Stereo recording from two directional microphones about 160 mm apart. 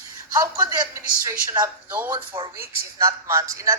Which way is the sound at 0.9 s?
20° right (ahead or behind).